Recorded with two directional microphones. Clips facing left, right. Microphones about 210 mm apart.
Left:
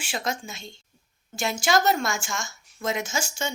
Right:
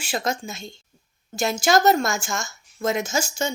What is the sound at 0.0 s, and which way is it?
Speech, 40° right (ahead or behind).